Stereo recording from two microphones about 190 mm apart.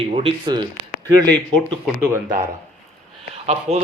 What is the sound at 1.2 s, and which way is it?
Speech, 5° left (ahead or behind).